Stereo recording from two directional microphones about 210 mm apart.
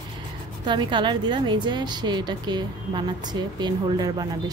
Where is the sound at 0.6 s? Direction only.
20° right (ahead or behind).